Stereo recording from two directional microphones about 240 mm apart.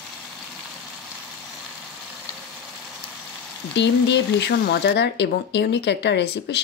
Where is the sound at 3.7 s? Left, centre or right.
Left.